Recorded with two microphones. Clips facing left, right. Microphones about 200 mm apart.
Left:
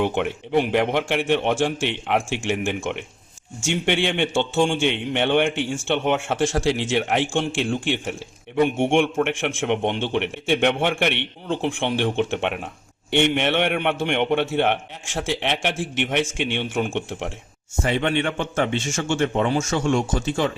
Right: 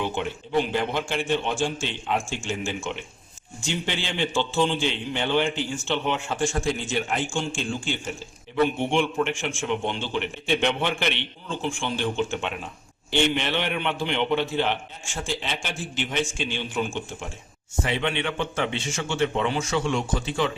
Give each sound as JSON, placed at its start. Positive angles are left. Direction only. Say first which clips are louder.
{"t": 0.0, "sound": "a man's voice", "louder": "left 6 dB", "side_deg": 65}
{"t": 5.9, "sound": "a man's voice", "louder": "left 5 dB", "side_deg": 70}
{"t": 8.8, "sound": "a man's voice", "louder": "left 4 dB", "side_deg": 55}
{"t": 17.8, "sound": "a man's voice", "louder": "left 5 dB", "side_deg": 45}